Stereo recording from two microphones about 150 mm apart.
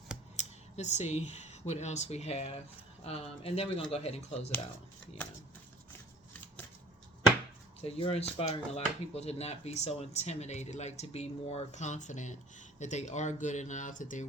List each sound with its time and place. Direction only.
0.3 s speech: 50° left (ahead or behind)
7.8 s speech: 40° left (ahead or behind); by 14.3 s 60° left (ahead or behind)